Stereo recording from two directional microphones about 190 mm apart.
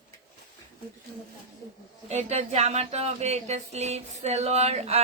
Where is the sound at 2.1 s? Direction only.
35° right (ahead or behind).